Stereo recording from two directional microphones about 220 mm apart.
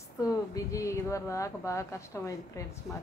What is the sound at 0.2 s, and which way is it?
A woman's voice, 15° left (ahead or behind).